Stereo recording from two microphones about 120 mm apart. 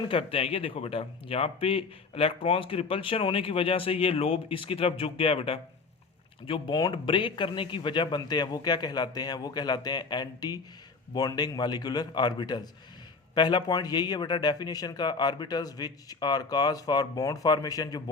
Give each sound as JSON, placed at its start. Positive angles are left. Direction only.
{"t": 0.1, "sound": "speech", "side_deg": 50}